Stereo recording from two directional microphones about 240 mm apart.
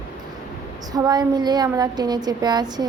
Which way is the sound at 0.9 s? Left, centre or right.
Centre.